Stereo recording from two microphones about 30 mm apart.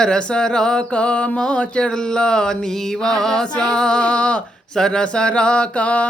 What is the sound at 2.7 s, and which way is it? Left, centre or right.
Mantra, centre.